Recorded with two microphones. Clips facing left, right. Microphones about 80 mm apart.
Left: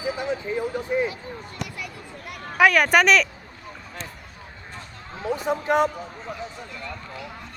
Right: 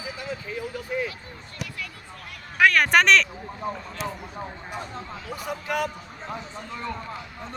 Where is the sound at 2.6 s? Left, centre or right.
Centre.